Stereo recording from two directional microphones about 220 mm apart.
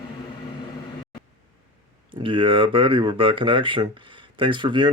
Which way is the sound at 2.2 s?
20° right (ahead or behind).